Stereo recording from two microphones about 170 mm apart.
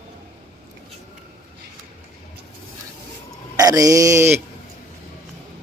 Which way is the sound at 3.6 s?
20° right (ahead or behind).